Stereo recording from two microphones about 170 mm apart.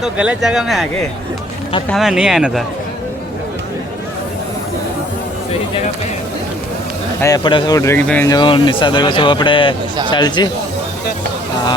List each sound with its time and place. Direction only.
0.0 s speech: 5° right (ahead or behind)
1.9 s speech: centre (ahead or behind)
7.2 s speech: 20° left (ahead or behind)
8.3 s speech: 25° left (ahead or behind)